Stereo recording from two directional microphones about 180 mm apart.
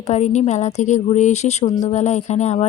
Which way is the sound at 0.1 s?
40° left (ahead or behind).